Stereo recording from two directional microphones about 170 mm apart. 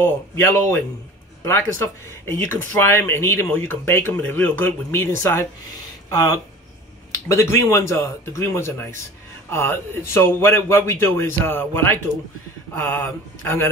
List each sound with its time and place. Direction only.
0.0 s speech: 15° left (ahead or behind)